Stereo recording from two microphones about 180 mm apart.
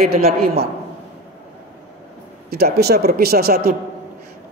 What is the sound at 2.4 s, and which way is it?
A woman's voice, 60° right (ahead or behind).